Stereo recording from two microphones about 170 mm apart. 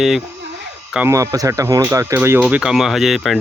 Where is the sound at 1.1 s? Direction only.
20° right (ahead or behind).